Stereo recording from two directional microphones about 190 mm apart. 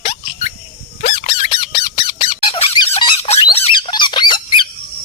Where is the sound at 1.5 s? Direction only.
25° left (ahead or behind).